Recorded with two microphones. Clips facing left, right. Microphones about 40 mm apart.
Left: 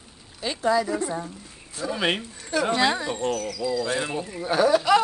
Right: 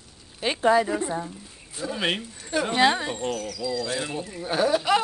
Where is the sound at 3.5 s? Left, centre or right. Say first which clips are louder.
Left 3 dB; left.